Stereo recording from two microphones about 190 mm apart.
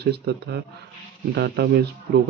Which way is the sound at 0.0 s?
60° right (ahead or behind).